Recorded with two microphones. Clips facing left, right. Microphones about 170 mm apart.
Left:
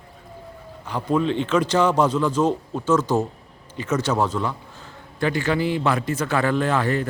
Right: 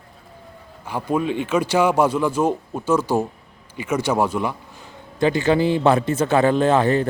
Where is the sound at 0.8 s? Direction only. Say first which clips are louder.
Even; 10° right (ahead or behind).